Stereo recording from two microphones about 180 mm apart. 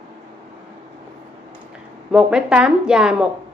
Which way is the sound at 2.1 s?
5° right (ahead or behind).